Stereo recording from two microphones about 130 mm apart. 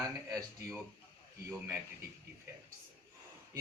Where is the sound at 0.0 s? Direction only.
25° right (ahead or behind).